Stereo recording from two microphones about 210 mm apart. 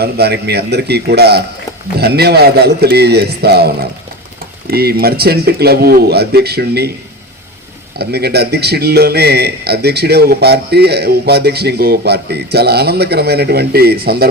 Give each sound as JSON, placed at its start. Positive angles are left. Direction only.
{"t": 0.0, "sound": "a man's voice", "side_deg": -50}
{"t": 4.7, "sound": "a man's voice", "side_deg": -45}
{"t": 7.9, "sound": "a man's voice", "side_deg": -50}